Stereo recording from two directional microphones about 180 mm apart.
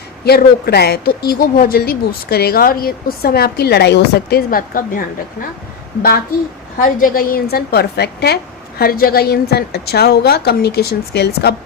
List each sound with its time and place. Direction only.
0.3 s a woman's voice: 60° left (ahead or behind)
6.7 s a woman's voice: 50° left (ahead or behind); by 11.5 s 65° left (ahead or behind)